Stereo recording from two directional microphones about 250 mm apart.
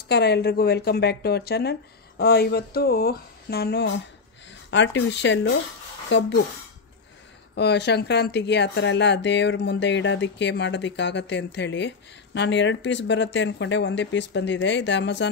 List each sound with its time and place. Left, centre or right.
0.1 s speech: left
7.5 s speech: left